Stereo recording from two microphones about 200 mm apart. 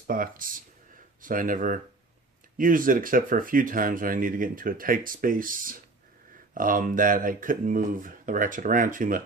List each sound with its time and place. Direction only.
0.1 s speech: 45° right (ahead or behind)